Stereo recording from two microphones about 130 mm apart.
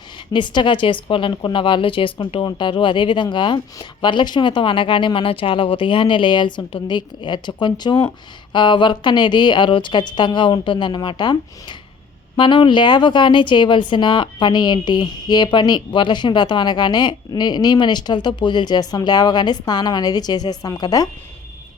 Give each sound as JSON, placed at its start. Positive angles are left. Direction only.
{"t": 0.3, "sound": "speech", "side_deg": 35}